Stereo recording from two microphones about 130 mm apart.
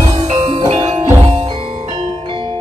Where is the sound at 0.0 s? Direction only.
55° right (ahead or behind).